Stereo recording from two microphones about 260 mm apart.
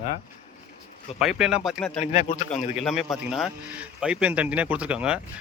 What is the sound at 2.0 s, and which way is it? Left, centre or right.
Speech, left.